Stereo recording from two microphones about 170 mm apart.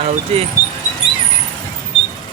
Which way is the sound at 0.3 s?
35° right (ahead or behind).